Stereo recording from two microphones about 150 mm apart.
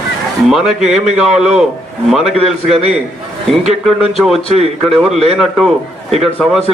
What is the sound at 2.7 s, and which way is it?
Speech, 45° right (ahead or behind).